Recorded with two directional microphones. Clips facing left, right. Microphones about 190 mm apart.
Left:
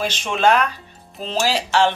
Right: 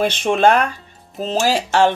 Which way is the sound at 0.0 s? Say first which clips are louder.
Right 4 dB; 55° right (ahead or behind).